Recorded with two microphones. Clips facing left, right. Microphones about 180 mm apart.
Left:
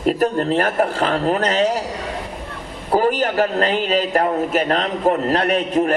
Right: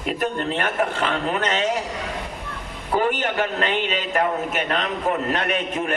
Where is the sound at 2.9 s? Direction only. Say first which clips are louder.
Left 5 dB; 35° left (ahead or behind).